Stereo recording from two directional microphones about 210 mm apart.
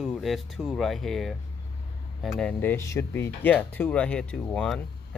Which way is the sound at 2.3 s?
5° left (ahead or behind).